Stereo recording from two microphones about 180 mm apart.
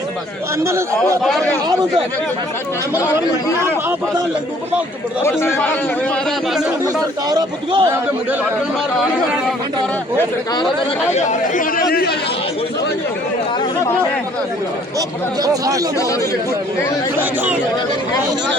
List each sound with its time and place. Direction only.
5.2 s speech: 15° left (ahead or behind)
6.8 s speech: 20° right (ahead or behind)
11.1 s speech: 45° left (ahead or behind)
15.4 s speech: 20° right (ahead or behind)